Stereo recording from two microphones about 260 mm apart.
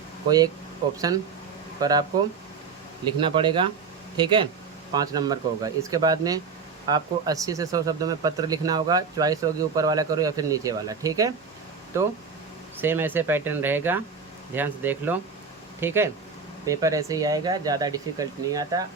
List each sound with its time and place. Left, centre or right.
0.3 s speech: centre
1.8 s speech: centre
3.2 s speech: centre